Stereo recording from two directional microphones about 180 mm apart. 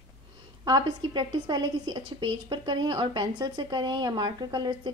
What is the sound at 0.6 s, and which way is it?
A woman's voice, 25° right (ahead or behind).